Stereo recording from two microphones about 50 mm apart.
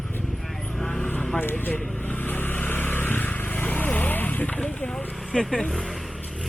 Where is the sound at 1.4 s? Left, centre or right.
Left.